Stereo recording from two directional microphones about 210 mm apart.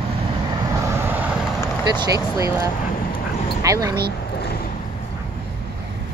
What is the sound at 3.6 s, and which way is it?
Speech, 15° right (ahead or behind).